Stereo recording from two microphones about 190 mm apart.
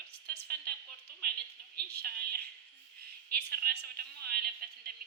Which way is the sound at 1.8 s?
55° right (ahead or behind).